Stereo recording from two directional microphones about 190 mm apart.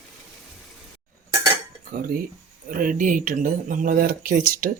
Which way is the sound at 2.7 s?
45° right (ahead or behind).